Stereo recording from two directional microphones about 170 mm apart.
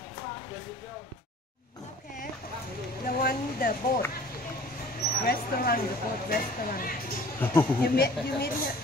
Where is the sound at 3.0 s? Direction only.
60° left (ahead or behind).